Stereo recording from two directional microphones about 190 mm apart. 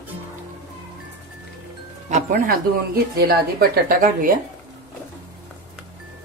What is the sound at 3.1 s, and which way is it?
A woman's voice, 55° right (ahead or behind).